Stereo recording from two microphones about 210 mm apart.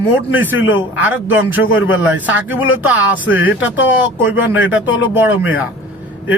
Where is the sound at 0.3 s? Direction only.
10° right (ahead or behind).